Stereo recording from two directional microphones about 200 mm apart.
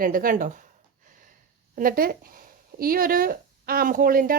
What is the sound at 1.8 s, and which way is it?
A woman's voice, 45° right (ahead or behind).